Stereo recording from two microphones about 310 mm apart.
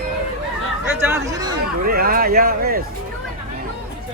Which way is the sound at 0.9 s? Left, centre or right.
Centre.